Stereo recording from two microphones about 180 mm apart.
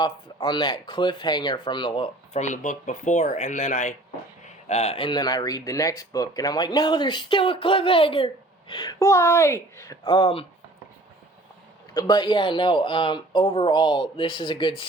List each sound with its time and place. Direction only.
0.0 s speech: 25° left (ahead or behind)
11.9 s speech: 25° left (ahead or behind)